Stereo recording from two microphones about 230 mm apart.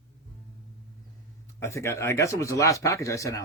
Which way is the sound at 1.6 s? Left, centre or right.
Centre.